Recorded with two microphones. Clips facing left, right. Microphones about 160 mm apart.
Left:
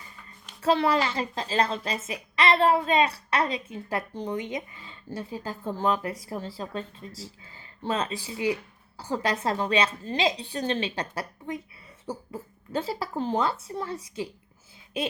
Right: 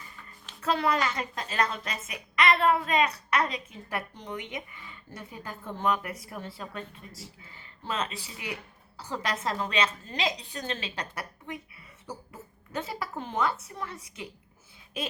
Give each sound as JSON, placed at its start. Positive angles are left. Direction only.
{"t": 0.6, "sound": "a woman's voice", "side_deg": 30}
{"t": 7.8, "sound": "a woman's voice", "side_deg": 30}